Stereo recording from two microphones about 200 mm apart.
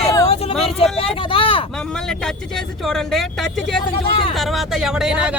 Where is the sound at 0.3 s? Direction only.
30° left (ahead or behind).